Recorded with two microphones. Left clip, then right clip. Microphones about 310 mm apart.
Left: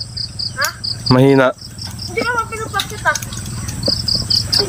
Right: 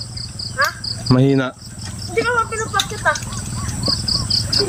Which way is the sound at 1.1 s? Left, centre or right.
Centre.